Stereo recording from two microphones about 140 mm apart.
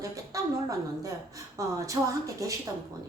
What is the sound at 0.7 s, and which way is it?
A woman's voice, 25° right (ahead or behind).